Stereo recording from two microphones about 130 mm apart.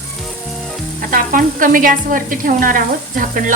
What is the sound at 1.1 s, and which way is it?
Speech, 90° right.